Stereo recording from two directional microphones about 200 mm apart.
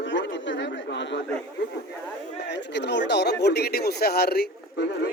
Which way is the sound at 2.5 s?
60° left (ahead or behind).